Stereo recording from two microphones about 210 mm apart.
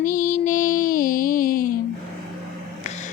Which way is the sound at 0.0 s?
40° left (ahead or behind).